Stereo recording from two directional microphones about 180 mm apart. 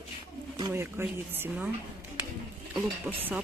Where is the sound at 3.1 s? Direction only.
10° right (ahead or behind).